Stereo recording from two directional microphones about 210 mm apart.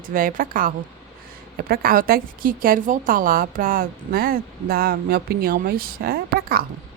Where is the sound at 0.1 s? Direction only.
40° right (ahead or behind).